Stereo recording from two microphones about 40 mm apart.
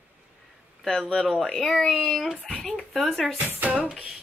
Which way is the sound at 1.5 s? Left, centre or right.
Centre.